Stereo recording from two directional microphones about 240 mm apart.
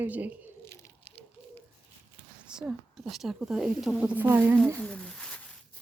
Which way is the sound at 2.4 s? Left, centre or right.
Centre.